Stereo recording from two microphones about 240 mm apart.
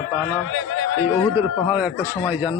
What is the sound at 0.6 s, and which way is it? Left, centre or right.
Chatter, left.